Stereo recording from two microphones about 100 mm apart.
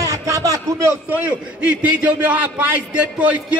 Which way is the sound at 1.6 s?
15° right (ahead or behind).